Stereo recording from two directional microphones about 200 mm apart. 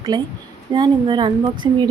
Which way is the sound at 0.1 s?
20° right (ahead or behind).